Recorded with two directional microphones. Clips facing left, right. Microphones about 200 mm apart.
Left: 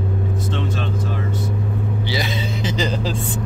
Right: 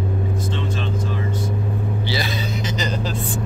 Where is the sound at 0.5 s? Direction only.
65° left (ahead or behind).